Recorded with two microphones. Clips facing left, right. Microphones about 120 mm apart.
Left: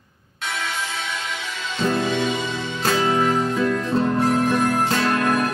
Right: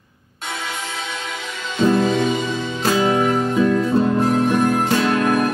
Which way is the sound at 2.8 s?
15° right (ahead or behind).